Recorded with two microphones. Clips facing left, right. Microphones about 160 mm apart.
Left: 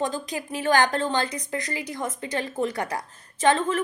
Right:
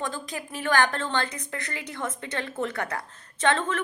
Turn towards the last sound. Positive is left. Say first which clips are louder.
# left 3 dB
turn(degrees=10)  # may be behind; listen again after turning